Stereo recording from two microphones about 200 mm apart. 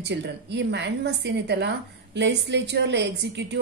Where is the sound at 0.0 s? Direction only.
60° right (ahead or behind).